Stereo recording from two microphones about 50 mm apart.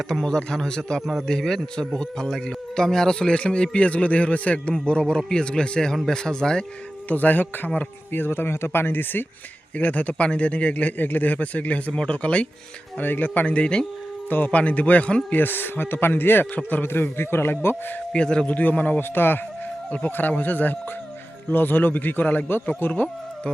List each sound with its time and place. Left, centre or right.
0.1 s a man's voice: centre
7.1 s a man's voice: left
9.7 s speech: left
13.0 s a man's voice: left
14.3 s speech: left
15.4 s speech: left
18.1 s speech: centre
18.4 s speech: left
18.9 s a man's voice: left